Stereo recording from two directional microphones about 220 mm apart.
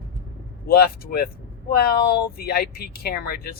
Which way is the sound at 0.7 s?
45° left (ahead or behind).